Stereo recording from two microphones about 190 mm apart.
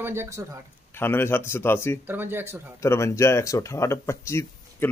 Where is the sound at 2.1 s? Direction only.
10° right (ahead or behind).